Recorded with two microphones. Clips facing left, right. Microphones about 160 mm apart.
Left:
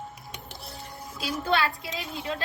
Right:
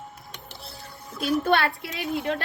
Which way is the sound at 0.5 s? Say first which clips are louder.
Left 1 dB; 15° left (ahead or behind).